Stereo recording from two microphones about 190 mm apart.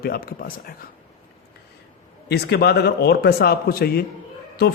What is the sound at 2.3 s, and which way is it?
A man's voice, 60° left (ahead or behind).